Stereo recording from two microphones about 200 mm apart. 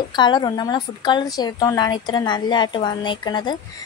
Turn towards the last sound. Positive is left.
turn(degrees=20)  # may be behind; listen again after turning